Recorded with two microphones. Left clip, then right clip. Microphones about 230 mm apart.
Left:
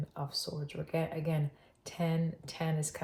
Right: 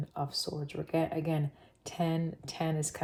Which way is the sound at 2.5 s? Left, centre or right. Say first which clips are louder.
Right 4 dB; right.